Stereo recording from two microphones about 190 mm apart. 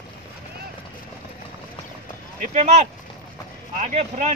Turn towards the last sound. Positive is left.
turn(degrees=-35)  # may be behind; listen again after turning